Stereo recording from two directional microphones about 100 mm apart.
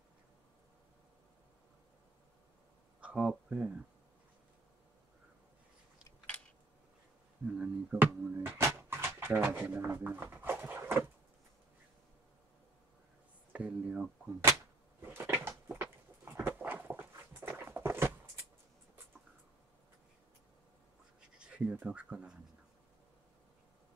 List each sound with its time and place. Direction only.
3.0 s speech: 10° right (ahead or behind)
7.4 s speech: 10° right (ahead or behind)
8.0 s speech: 20° right (ahead or behind)
13.5 s speech: 15° right (ahead or behind)
15.0 s cupboard open or close: 20° right (ahead or behind)
21.4 s speech: 10° right (ahead or behind)